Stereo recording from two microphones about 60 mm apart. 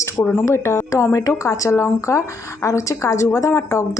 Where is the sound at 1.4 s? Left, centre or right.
Left.